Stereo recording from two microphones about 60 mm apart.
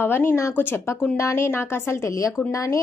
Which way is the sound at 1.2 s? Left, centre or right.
Left.